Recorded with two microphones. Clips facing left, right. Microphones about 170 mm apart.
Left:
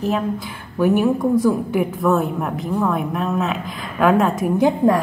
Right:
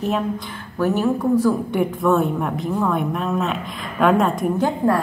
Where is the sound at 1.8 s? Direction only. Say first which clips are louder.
Even; centre (ahead or behind).